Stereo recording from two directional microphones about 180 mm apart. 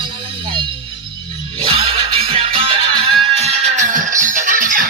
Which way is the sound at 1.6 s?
30° right (ahead or behind).